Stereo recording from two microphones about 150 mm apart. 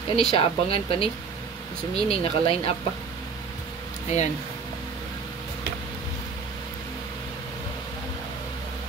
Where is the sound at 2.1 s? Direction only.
40° left (ahead or behind).